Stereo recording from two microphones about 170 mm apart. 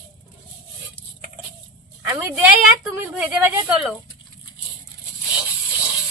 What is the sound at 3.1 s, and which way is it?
Speech, 5° right (ahead or behind).